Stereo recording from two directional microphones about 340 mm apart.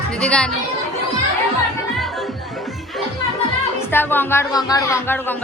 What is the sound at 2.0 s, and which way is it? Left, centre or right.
Music, centre.